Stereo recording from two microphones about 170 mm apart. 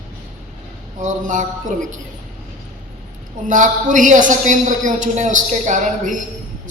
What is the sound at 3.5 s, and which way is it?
A man's voice, 50° right (ahead or behind).